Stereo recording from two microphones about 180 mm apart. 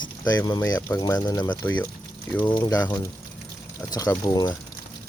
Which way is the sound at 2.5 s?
20° left (ahead or behind).